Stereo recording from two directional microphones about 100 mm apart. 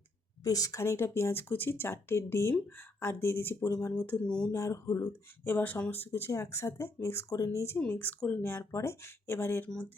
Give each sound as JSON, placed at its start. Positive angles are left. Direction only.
{"t": 0.4, "sound": "speech", "side_deg": 40}
{"t": 5.5, "sound": "speech", "side_deg": 20}
{"t": 7.8, "sound": "speech", "side_deg": 15}